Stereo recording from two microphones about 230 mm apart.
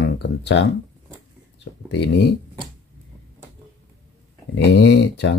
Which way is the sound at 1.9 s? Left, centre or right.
Left.